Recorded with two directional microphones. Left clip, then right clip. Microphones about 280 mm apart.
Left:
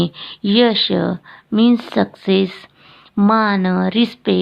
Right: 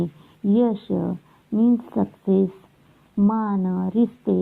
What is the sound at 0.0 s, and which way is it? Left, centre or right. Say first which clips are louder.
Speech: left 7 dB; left.